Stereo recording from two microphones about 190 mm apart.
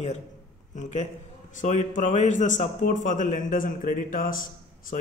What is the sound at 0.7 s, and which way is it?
A man's voice, 40° left (ahead or behind).